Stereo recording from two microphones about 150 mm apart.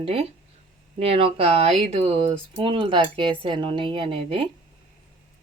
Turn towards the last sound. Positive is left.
turn(degrees=-35)  # may be behind; listen again after turning